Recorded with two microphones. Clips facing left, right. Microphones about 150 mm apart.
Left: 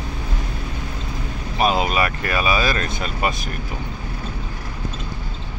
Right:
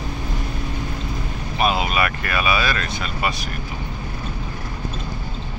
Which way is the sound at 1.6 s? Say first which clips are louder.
Left 1 dB; 35° left (ahead or behind).